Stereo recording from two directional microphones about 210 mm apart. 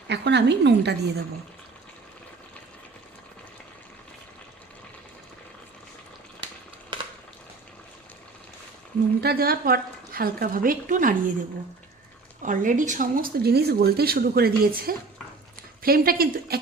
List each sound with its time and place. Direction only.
0.1 s a woman's voice: 55° right (ahead or behind)
9.2 s speech: 45° right (ahead or behind)
12.4 s speech: 35° right (ahead or behind)